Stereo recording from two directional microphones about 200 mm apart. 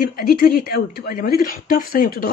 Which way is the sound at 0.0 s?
45° left (ahead or behind).